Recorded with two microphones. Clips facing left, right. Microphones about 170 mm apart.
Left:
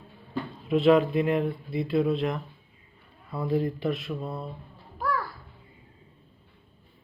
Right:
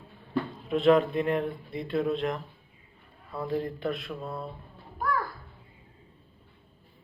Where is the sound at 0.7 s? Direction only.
Centre (ahead or behind).